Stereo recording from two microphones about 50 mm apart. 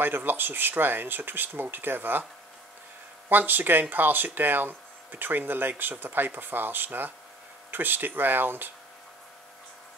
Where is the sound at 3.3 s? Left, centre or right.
Right.